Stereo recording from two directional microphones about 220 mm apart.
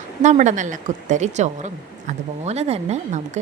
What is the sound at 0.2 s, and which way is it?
A woman's voice, 35° right (ahead or behind).